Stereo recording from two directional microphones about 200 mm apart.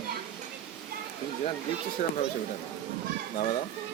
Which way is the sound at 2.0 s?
35° left (ahead or behind).